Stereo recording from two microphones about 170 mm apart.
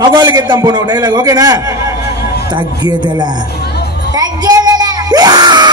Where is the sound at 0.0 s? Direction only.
25° right (ahead or behind).